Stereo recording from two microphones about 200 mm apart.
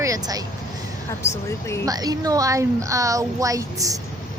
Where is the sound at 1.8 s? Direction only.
20° right (ahead or behind).